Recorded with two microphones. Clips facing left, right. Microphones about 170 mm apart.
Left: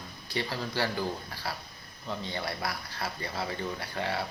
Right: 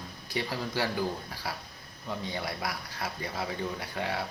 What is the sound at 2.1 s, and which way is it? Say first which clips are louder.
Speech: even; 5° right (ahead or behind).